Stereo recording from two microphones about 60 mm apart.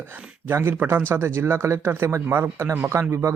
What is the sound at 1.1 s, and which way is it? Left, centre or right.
Speech, right.